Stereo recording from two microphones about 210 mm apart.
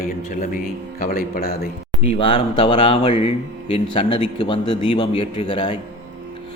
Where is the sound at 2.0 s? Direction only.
25° left (ahead or behind).